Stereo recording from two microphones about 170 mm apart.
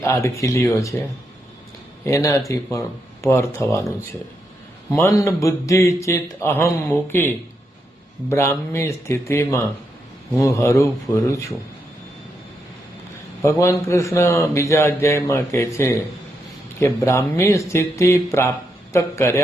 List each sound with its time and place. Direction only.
0.0 s speech: 15° left (ahead or behind)
2.0 s speech: 20° left (ahead or behind)
4.9 s speech: 20° left (ahead or behind)
13.4 s speech: 15° left (ahead or behind)